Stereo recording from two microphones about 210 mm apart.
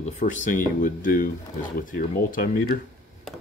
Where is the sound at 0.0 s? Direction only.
35° left (ahead or behind).